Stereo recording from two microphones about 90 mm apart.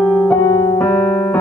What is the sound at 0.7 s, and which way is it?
Keyboard, 20° left (ahead or behind).